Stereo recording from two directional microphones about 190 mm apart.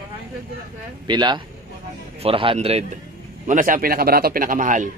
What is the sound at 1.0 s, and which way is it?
A man's voice, 25° right (ahead or behind).